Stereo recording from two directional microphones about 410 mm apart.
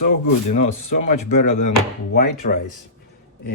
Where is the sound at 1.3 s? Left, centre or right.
Left.